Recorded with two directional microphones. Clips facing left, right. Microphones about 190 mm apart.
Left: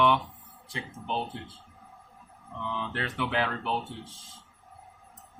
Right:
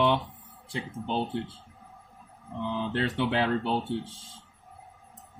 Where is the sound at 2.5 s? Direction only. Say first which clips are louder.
Right 4 dB; 35° right (ahead or behind).